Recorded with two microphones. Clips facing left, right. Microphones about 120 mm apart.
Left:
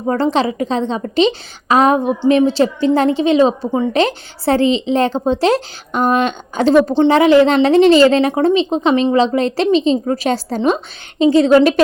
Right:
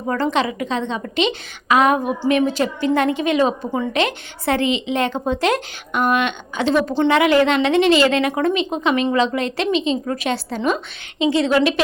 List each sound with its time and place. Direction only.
0.1 s a woman's voice: 30° left (ahead or behind)